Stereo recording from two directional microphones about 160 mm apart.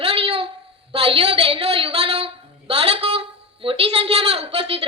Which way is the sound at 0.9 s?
35° right (ahead or behind).